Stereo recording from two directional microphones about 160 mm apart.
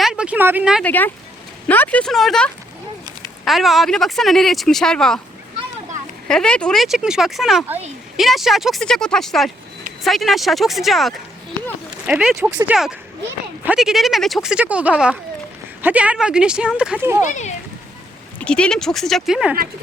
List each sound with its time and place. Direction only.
0.0 s a sound: 5° right (ahead or behind)
0.9 s speech: 10° left (ahead or behind)
6.2 s speech: 5° left (ahead or behind)
12.4 s speech: 25° right (ahead or behind)
12.6 s speech: 5° right (ahead or behind)
17.2 s a child's voice: 45° left (ahead or behind)
18.3 s speech: 5° left (ahead or behind)